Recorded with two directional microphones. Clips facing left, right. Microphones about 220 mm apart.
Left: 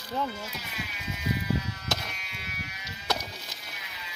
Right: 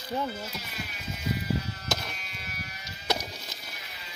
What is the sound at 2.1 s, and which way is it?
Sheep, 40° right (ahead or behind).